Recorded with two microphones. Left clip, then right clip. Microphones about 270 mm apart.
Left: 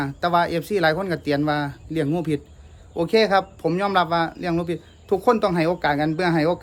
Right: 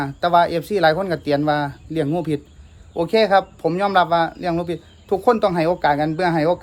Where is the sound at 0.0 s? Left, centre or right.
Centre.